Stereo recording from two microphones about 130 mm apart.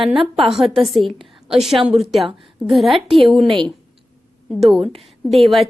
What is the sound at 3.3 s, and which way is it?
Speech, 45° right (ahead or behind).